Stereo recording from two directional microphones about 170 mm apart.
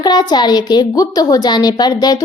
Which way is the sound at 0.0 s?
25° left (ahead or behind).